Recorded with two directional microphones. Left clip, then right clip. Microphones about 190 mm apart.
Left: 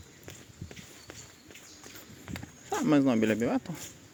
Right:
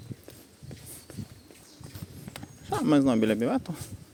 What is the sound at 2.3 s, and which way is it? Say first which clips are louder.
Speech: right 2 dB; 15° right (ahead or behind).